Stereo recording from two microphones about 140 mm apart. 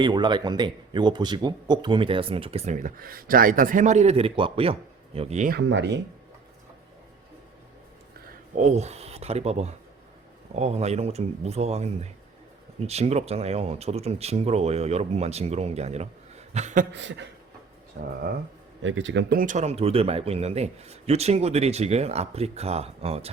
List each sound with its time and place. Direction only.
0.0 s speech: 35° right (ahead or behind)
2.7 s a man's voice: 80° right; by 5.5 s 50° right (ahead or behind)
8.5 s speech: 55° right (ahead or behind)
16.5 s a sound: 55° right (ahead or behind)
18.0 s speech: 75° right (ahead or behind)
19.3 s speech: 90° right
19.5 s speech: 50° right (ahead or behind)